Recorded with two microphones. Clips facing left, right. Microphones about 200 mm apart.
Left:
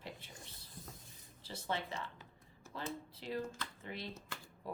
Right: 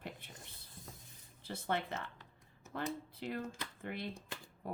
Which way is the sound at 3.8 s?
55° right (ahead or behind).